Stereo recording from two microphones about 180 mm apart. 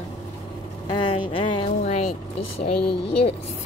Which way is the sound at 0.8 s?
25° left (ahead or behind).